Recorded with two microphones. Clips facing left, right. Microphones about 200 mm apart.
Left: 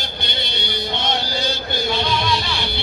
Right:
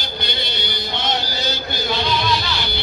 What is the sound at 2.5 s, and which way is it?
Vehicle, 25° left (ahead or behind).